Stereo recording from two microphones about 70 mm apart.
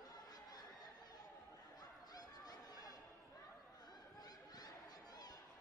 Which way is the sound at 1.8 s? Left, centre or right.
Left.